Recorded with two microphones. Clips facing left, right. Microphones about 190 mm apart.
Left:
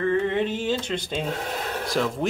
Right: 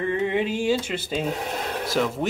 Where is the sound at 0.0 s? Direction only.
15° right (ahead or behind).